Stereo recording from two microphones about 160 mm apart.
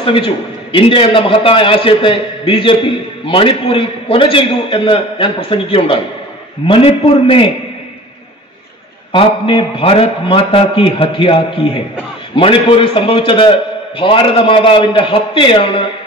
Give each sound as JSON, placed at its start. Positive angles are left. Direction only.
{"t": 0.0, "sound": "a man's voice", "side_deg": 35}
{"t": 9.1, "sound": "a man's voice", "side_deg": 30}